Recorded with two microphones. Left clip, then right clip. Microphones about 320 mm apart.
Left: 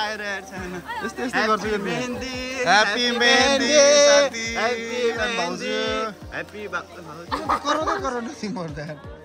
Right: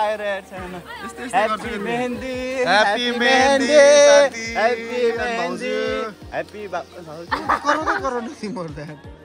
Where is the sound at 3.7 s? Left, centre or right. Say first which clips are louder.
Right 4 dB; right.